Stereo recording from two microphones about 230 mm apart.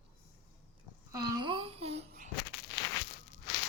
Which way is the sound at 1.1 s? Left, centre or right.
Centre.